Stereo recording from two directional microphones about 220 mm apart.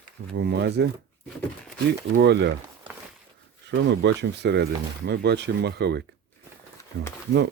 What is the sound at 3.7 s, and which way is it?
Speech, 50° right (ahead or behind).